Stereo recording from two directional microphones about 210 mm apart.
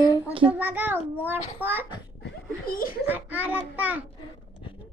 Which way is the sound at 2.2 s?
45° left (ahead or behind).